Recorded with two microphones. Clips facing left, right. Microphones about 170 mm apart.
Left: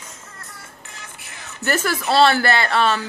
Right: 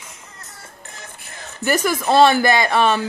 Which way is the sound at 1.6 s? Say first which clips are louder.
Right 3 dB; 15° right (ahead or behind).